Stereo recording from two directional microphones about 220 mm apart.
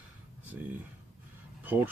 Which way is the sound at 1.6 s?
10° right (ahead or behind).